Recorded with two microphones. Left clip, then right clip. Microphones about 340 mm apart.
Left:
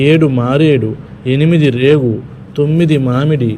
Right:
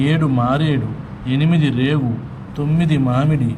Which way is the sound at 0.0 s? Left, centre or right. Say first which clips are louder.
Left 8 dB; centre.